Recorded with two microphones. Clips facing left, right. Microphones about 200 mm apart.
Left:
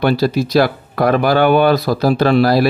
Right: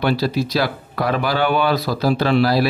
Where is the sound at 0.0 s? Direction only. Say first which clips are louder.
Left 4 dB; 45° left (ahead or behind).